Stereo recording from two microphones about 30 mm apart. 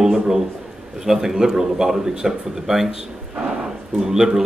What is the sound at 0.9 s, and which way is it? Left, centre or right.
A man's voice, centre.